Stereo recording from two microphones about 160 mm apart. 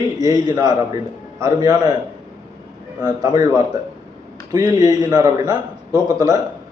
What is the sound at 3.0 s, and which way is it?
A man's voice, 25° right (ahead or behind).